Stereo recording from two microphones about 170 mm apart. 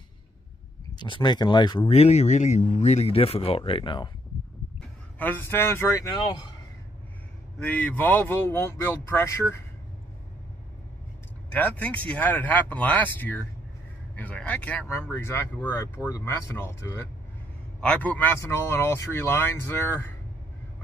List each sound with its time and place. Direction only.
0.9 s speech: 25° left (ahead or behind)
5.2 s speech: 10° left (ahead or behind)
7.5 s speech: 10° left (ahead or behind)
11.5 s speech: 10° left (ahead or behind)
17.7 s speech: 5° left (ahead or behind)